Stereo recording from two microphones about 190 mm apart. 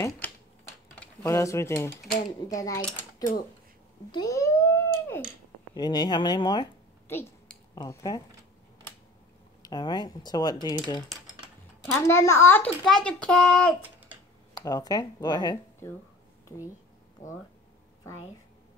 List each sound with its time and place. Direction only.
0.9 s a child's voice: 15° left (ahead or behind)
4.1 s a sound: 20° left (ahead or behind)
5.8 s speech: 20° left (ahead or behind)
7.7 s speech: 20° left (ahead or behind)
9.6 s speech: 20° left (ahead or behind)
12.0 s a child's voice: 15° left (ahead or behind)
14.6 s speech: 20° left (ahead or behind)
17.2 s speech: 40° left (ahead or behind)